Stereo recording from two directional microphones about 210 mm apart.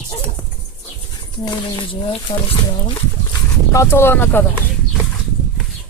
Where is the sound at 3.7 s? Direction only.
10° left (ahead or behind).